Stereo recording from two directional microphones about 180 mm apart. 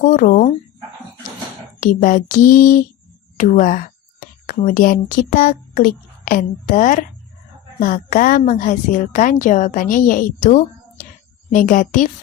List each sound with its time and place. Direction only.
0.0 s a woman's voice: 50° left (ahead or behind)
1.8 s a woman's voice: 45° left (ahead or behind)